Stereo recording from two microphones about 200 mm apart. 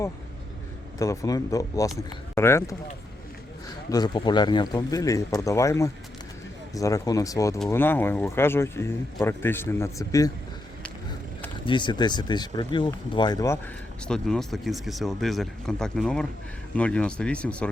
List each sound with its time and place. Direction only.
0.9 s speech: 15° left (ahead or behind)
3.8 s speech: 20° left (ahead or behind)
11.6 s speech: 25° left (ahead or behind)
14.1 s speech: centre (ahead or behind)